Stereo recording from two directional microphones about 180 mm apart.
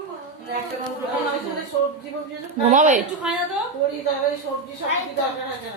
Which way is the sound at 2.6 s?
45° right (ahead or behind).